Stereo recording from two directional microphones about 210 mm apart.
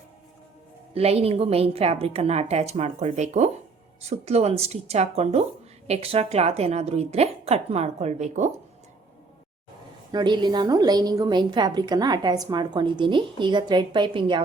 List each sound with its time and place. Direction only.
0.9 s a woman's voice: 30° right (ahead or behind)
10.1 s a woman's voice: 20° right (ahead or behind)